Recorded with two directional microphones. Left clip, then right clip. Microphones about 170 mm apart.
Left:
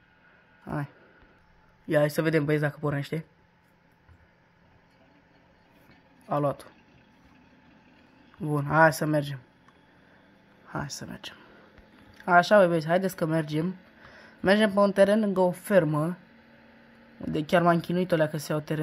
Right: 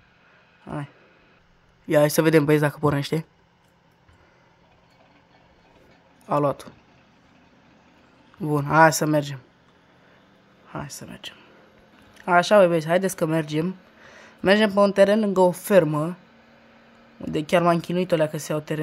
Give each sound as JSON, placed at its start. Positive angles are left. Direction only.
{"t": 0.7, "sound": "speech", "side_deg": -5}
{"t": 1.9, "sound": "speech", "side_deg": -30}
{"t": 6.2, "sound": "speech", "side_deg": -25}
{"t": 8.4, "sound": "speech", "side_deg": -25}
{"t": 10.7, "sound": "speech", "side_deg": -5}
{"t": 12.3, "sound": "speech", "side_deg": -15}
{"t": 15.3, "sound": "speech", "side_deg": -25}
{"t": 17.2, "sound": "speech", "side_deg": -15}